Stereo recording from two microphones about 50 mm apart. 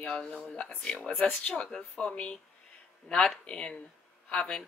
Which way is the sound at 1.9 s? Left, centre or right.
Left.